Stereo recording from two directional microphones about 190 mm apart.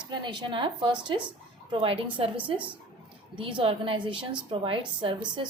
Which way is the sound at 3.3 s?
25° right (ahead or behind).